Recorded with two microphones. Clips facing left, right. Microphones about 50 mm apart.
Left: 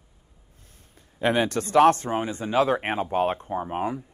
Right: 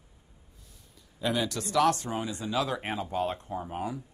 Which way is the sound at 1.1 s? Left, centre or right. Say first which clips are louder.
Left 7 dB; left.